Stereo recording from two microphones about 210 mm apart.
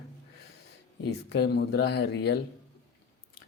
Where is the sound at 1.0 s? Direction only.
50° left (ahead or behind).